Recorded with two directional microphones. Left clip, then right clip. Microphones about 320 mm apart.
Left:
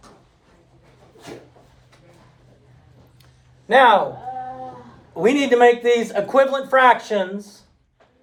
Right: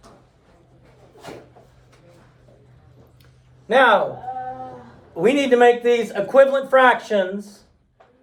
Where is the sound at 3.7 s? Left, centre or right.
Centre.